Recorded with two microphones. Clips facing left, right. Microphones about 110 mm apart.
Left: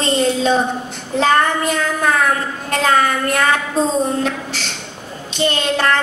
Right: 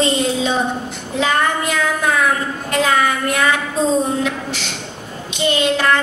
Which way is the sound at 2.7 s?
40° left (ahead or behind).